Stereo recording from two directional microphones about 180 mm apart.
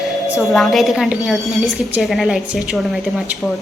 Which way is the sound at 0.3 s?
Centre (ahead or behind).